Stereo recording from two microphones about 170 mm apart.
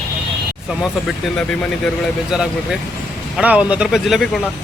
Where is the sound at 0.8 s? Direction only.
5° left (ahead or behind).